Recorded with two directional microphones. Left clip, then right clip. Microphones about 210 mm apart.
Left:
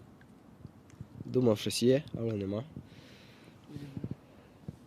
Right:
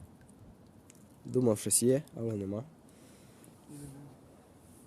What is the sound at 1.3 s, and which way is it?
Speech, 25° right (ahead or behind).